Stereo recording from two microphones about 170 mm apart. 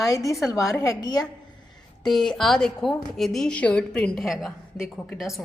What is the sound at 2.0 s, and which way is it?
Speech, 5° left (ahead or behind).